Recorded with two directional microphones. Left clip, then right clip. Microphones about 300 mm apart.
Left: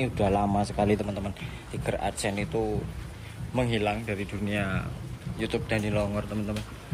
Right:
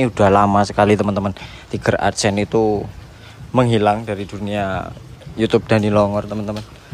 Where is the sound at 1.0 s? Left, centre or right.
Right.